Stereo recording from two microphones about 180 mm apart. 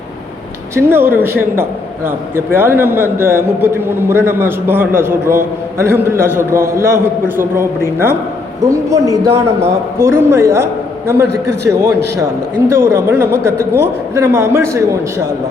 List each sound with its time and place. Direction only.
0.8 s a man's voice: 15° right (ahead or behind)